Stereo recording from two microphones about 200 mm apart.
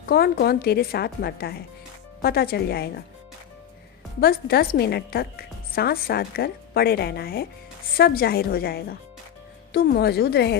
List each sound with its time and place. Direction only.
0.1 s a woman's voice: 50° left (ahead or behind)
4.2 s a woman's voice: 50° left (ahead or behind)